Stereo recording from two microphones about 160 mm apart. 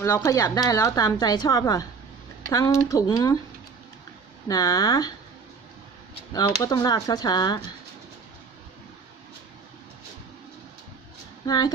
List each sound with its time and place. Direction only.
0.0 s speech: 20° left (ahead or behind)
4.4 s speech: 20° left (ahead or behind)
6.3 s speech: 25° left (ahead or behind)
11.4 s speech: 25° left (ahead or behind)